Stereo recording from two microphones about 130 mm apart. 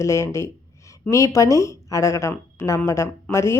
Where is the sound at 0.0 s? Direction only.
20° left (ahead or behind).